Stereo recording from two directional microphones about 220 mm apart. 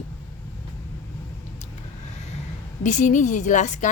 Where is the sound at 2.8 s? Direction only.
35° left (ahead or behind).